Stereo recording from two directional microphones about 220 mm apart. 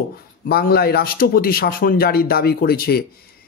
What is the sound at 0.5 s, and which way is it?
A man's voice, 45° left (ahead or behind).